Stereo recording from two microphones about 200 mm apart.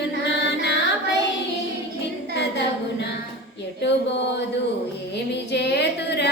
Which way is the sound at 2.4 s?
60° left (ahead or behind).